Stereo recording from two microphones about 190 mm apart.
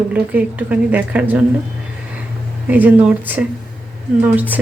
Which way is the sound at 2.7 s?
10° right (ahead or behind).